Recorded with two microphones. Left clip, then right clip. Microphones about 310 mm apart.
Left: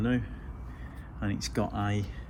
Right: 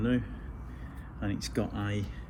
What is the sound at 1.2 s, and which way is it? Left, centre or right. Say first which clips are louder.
Speech: left 2 dB; centre.